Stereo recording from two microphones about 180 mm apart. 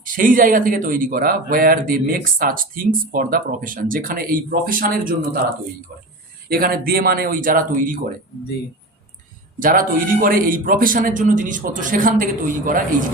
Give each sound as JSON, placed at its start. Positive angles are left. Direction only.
{"t": 0.0, "sound": "speech", "side_deg": -50}
{"t": 6.5, "sound": "speech", "side_deg": -55}
{"t": 9.6, "sound": "speech", "side_deg": -50}